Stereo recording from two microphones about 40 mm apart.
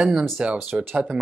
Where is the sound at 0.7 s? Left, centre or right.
Right.